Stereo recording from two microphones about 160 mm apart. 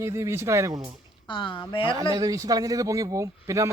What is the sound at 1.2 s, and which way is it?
Speech, 30° left (ahead or behind).